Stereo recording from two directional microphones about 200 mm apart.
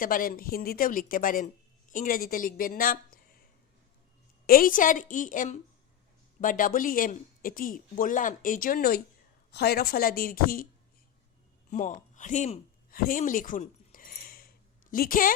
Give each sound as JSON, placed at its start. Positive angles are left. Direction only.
{"t": 0.0, "sound": "a woman's voice", "side_deg": 45}
{"t": 4.4, "sound": "a woman's voice", "side_deg": 45}
{"t": 11.7, "sound": "a sound", "side_deg": 40}